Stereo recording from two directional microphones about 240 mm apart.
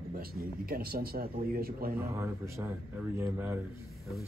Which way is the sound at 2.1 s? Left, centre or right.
Centre.